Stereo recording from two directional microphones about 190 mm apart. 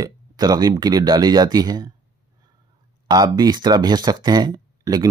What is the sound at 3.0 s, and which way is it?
Speech, 20° right (ahead or behind).